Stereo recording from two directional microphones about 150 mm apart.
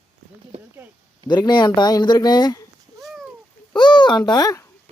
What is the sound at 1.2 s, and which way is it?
Speech, 30° left (ahead or behind).